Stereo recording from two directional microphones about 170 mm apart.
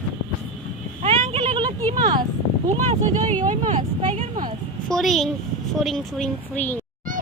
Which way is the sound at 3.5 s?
45° right (ahead or behind).